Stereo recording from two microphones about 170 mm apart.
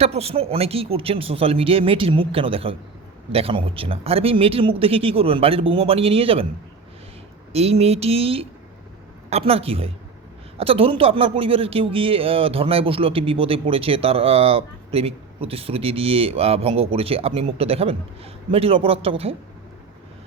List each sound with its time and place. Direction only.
0.0 s speech: 35° right (ahead or behind)
7.5 s speech: 35° right (ahead or behind)